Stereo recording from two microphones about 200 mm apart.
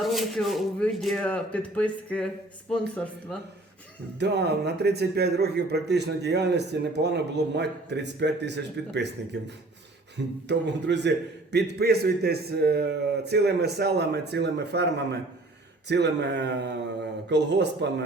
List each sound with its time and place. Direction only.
0.0 s speech: centre (ahead or behind)
4.2 s a man's voice: 55° right (ahead or behind)